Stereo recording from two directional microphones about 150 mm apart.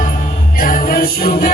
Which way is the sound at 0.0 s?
70° left (ahead or behind).